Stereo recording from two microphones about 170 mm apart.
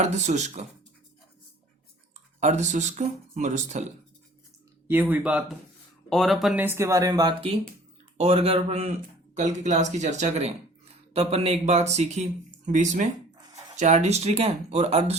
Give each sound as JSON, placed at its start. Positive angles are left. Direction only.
{"t": 0.0, "sound": "speech", "side_deg": -45}
{"t": 2.1, "sound": "speech", "side_deg": -45}
{"t": 4.9, "sound": "speech", "side_deg": -10}
{"t": 6.7, "sound": "speech", "side_deg": -15}